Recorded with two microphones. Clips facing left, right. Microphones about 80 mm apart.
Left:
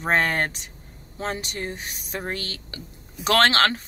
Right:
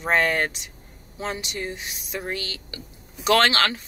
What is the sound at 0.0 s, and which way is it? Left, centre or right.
Speech, left.